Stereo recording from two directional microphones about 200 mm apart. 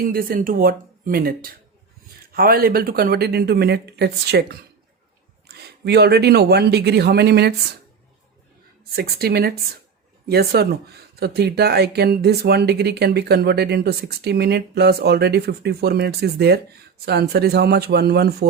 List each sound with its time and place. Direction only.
0.0 s speech: 45° right (ahead or behind)
8.8 s speech: 50° right (ahead or behind)